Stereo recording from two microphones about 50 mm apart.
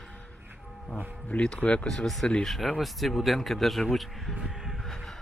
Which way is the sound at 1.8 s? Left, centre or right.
Centre.